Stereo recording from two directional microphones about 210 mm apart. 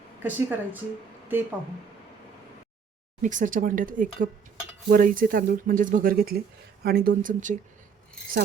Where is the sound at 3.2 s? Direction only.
40° right (ahead or behind).